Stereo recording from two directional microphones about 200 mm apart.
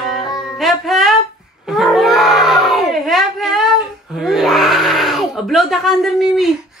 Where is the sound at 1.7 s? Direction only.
Centre (ahead or behind).